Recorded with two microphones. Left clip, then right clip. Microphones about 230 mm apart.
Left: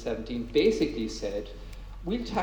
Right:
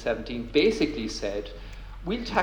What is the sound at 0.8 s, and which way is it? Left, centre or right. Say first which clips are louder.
Speech: right 1 dB; right.